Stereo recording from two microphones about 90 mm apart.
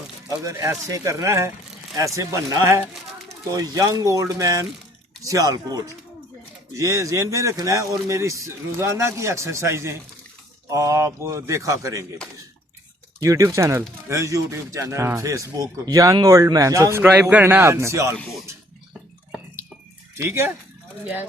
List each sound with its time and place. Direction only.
0.3 s speech: 40° right (ahead or behind)
13.2 s speech: 35° right (ahead or behind)
17.0 s a man's voice: 15° right (ahead or behind)
17.4 s speech: 30° right (ahead or behind)
20.1 s speech: 30° right (ahead or behind)